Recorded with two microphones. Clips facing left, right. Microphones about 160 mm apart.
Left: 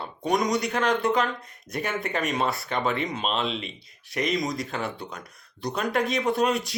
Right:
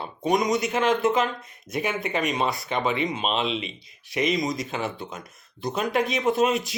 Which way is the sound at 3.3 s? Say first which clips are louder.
Right 2 dB; 20° right (ahead or behind).